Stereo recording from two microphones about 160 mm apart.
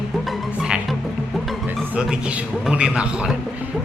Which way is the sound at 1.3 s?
Centre (ahead or behind).